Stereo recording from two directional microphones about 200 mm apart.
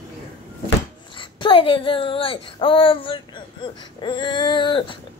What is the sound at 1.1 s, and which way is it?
Speech, 25° left (ahead or behind).